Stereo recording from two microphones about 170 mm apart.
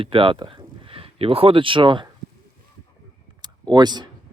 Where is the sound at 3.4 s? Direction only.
25° right (ahead or behind).